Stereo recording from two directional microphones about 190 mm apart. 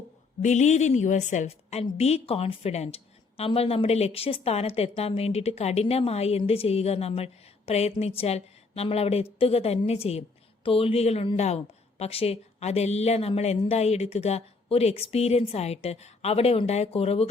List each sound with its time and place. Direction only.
0.4 s a woman's voice: 40° left (ahead or behind)